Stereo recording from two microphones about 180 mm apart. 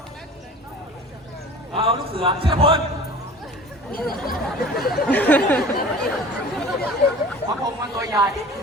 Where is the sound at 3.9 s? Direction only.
55° left (ahead or behind).